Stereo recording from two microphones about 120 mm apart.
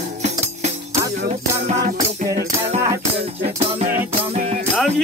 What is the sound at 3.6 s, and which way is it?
Music, 60° right (ahead or behind).